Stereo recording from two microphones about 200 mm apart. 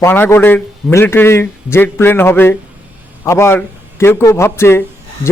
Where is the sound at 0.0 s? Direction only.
10° left (ahead or behind).